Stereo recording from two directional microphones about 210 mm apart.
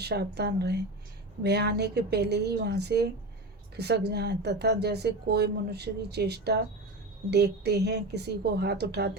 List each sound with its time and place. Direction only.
0.0 s speech: 50° right (ahead or behind)